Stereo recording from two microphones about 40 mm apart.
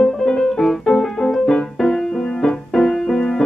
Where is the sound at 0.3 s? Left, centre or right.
Centre.